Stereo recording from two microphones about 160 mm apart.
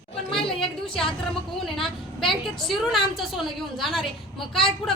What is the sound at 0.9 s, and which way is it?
A woman's voice, 5° left (ahead or behind).